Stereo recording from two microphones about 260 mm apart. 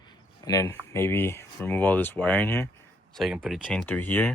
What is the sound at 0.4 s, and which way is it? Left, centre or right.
Speech, centre.